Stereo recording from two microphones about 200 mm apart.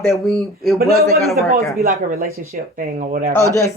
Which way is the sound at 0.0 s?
Centre (ahead or behind).